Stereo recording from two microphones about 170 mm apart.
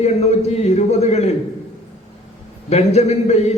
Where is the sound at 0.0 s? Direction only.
40° left (ahead or behind).